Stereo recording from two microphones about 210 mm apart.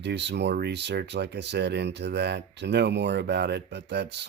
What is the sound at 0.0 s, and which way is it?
Speech, 55° right (ahead or behind).